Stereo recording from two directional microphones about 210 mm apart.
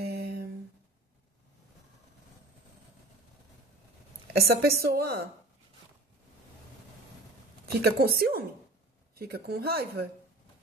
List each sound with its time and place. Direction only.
0.0 s a sound: 50° right (ahead or behind)
4.4 s speech: 45° right (ahead or behind)
7.8 s speech: 45° right (ahead or behind)